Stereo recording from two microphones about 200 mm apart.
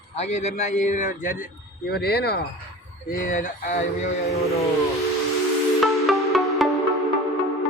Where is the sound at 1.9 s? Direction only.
55° left (ahead or behind).